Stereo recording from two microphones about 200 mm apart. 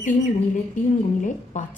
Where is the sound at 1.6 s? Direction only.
40° left (ahead or behind).